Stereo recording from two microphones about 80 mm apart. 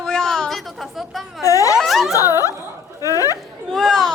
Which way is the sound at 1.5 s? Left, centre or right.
Left.